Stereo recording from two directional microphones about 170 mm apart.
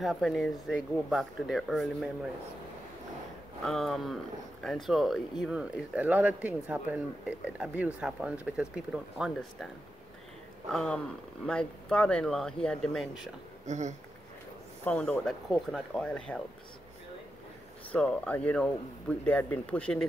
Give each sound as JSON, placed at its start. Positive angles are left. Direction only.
{"t": 0.0, "sound": "speech", "side_deg": 0}
{"t": 3.6, "sound": "speech", "side_deg": 0}
{"t": 10.7, "sound": "speech", "side_deg": 0}
{"t": 13.7, "sound": "speech", "side_deg": -45}
{"t": 14.9, "sound": "speech", "side_deg": 5}
{"t": 17.9, "sound": "speech", "side_deg": 5}